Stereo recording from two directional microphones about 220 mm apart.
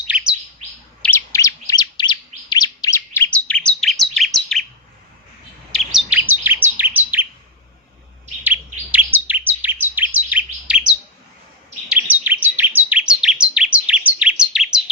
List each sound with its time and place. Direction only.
1.0 s bird: 10° left (ahead or behind)
5.7 s chirp: centre (ahead or behind)
8.4 s chirp: 10° right (ahead or behind)